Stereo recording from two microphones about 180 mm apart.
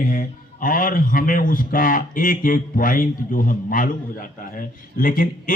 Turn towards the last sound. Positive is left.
turn(degrees=50)  # may be behind; listen again after turning